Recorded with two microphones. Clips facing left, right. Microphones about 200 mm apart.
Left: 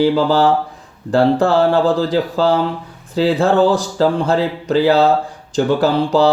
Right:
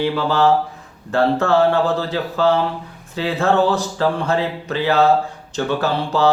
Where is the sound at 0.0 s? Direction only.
35° left (ahead or behind).